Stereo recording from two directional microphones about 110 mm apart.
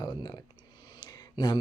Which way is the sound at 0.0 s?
35° left (ahead or behind).